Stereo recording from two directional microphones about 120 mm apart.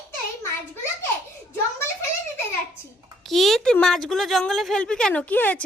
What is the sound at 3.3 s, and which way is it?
A woman's voice, centre (ahead or behind).